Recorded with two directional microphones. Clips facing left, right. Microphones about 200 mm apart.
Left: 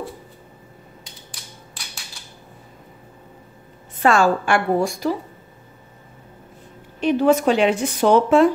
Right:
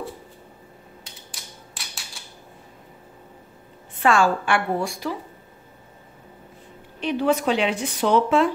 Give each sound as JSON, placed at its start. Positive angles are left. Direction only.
{"t": 4.0, "sound": "a woman's voice", "side_deg": 40}
{"t": 7.0, "sound": "a woman's voice", "side_deg": 45}